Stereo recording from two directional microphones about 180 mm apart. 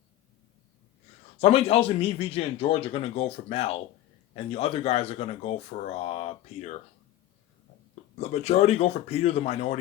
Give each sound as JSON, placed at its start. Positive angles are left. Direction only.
{"t": 1.4, "sound": "speech", "side_deg": 35}
{"t": 8.2, "sound": "speech", "side_deg": 35}